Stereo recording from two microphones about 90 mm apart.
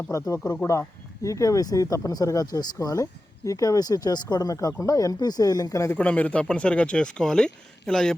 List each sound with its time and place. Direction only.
0.1 s speech: 35° left (ahead or behind)
6.0 s speech: 15° left (ahead or behind)